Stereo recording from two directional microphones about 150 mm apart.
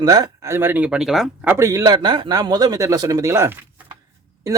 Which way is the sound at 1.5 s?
20° right (ahead or behind).